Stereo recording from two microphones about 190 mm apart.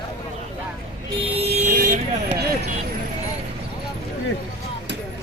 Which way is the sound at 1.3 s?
35° right (ahead or behind).